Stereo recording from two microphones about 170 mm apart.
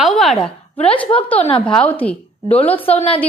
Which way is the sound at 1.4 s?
35° left (ahead or behind).